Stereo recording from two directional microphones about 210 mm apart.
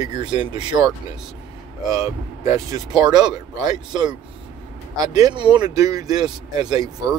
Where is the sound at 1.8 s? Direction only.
15° right (ahead or behind).